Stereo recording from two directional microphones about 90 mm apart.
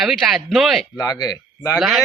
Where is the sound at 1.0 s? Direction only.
45° left (ahead or behind).